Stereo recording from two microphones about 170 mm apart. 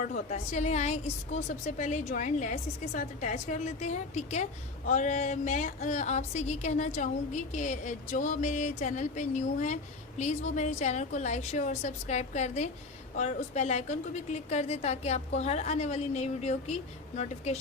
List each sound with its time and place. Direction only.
0.0 s a woman's voice: 45° left (ahead or behind)